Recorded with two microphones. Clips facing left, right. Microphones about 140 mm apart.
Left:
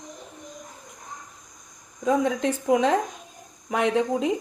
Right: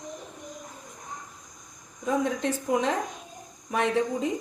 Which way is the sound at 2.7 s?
90° left.